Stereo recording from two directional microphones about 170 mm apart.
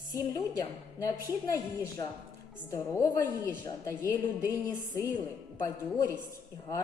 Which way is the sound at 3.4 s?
15° left (ahead or behind).